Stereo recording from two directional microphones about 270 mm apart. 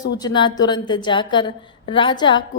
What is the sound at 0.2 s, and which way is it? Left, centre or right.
A woman's voice, centre.